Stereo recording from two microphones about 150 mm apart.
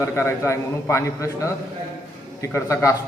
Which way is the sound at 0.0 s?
15° left (ahead or behind).